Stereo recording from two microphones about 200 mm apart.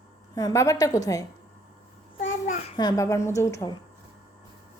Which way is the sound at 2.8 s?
20° left (ahead or behind).